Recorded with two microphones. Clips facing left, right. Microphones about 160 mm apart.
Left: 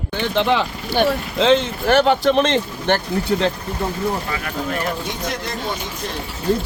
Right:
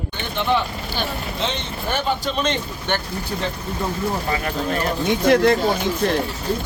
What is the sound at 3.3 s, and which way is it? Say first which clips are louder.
Speech: left 7 dB; 90° left.